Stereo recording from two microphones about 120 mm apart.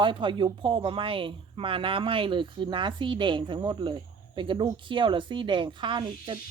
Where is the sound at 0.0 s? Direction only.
45° right (ahead or behind).